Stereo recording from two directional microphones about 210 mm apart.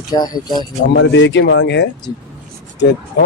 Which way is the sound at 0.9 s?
60° left (ahead or behind).